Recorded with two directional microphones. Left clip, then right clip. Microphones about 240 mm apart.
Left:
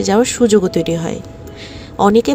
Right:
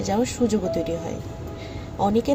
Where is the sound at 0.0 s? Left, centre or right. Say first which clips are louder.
Left 10 dB; left.